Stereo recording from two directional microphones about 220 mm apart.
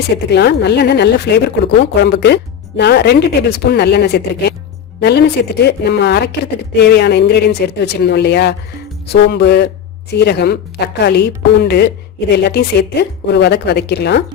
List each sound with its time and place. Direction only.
0.3 s a woman's voice: 50° left (ahead or behind)